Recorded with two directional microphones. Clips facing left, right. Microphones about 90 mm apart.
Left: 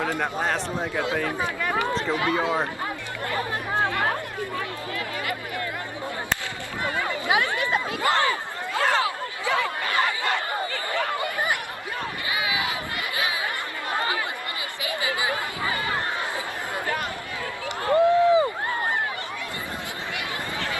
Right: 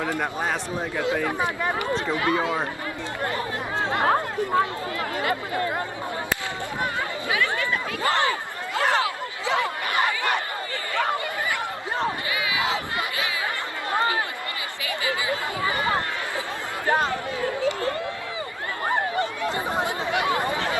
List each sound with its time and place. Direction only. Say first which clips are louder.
0.2 s speech: left 1 dB; 5° right (ahead or behind)
1.2 s speech: right 2 dB; 20° right (ahead or behind)
2.4 s speech: left 1 dB; 20° left (ahead or behind)
4.0 s speech: right 5 dB; 40° right (ahead or behind)
7.3 s speech: left 1 dB; 20° left (ahead or behind)
8.1 s a sound: even; 20° right (ahead or behind)
9.5 s chatter: even; 20° right (ahead or behind)
12.3 s crowd: even; 25° left (ahead or behind)
14.8 s chatter: even; 20° left (ahead or behind)
15.6 s run: right 4 dB; 25° right (ahead or behind)
16.8 s chatter: right 11 dB; 25° right (ahead or behind)
17.7 s a sound: left 6 dB; 25° left (ahead or behind)
19.7 s a sound: right 8 dB; 20° right (ahead or behind)